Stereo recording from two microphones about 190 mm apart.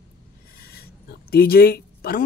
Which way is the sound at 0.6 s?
55° left (ahead or behind).